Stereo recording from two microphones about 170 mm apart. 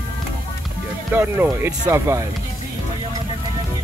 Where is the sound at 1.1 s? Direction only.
10° right (ahead or behind).